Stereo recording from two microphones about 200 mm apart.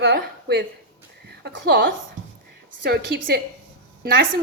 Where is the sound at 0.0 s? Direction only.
55° right (ahead or behind).